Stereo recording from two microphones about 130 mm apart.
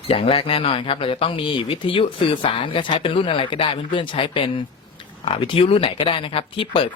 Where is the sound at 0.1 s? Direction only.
45° left (ahead or behind).